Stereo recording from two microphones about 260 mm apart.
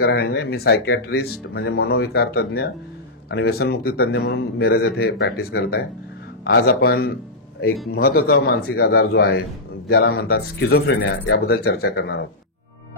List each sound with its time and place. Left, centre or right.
0.0 s a man's voice: left